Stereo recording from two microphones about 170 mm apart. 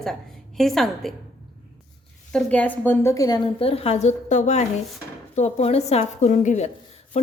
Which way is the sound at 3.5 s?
35° left (ahead or behind).